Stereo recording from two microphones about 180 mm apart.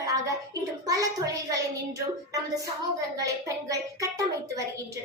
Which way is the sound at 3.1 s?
20° right (ahead or behind).